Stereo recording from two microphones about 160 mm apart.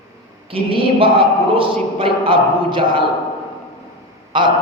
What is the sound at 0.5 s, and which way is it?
A man's voice, 35° right (ahead or behind).